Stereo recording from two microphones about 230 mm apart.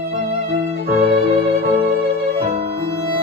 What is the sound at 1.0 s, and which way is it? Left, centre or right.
Music, right.